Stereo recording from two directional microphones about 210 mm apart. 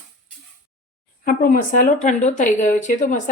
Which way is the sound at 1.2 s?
40° left (ahead or behind).